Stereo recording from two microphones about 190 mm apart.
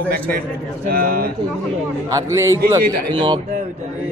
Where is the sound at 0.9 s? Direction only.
50° right (ahead or behind).